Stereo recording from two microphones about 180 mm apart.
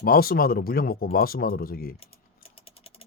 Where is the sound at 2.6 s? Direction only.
30° left (ahead or behind).